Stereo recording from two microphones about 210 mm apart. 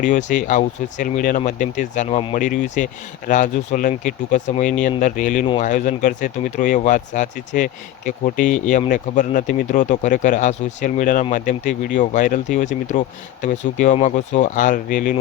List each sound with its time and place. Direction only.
0.0 s speech: 35° left (ahead or behind)